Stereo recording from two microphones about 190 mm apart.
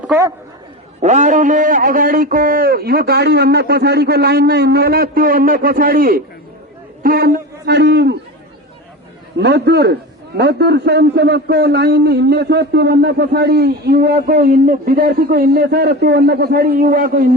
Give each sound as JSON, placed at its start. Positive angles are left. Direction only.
{"t": 0.1, "sound": "speech", "side_deg": -15}
{"t": 1.0, "sound": "a man's voice", "side_deg": -40}
{"t": 9.4, "sound": "a man's voice", "side_deg": -65}